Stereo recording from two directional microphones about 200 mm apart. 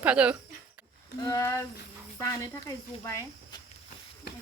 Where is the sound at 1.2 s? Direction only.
15° left (ahead or behind).